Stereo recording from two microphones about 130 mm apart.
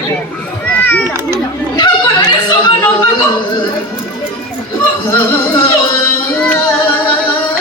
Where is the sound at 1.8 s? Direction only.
35° left (ahead or behind).